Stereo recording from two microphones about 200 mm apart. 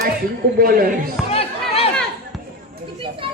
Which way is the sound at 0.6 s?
45° right (ahead or behind).